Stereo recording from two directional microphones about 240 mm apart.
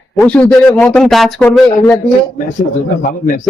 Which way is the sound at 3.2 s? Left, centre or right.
Left.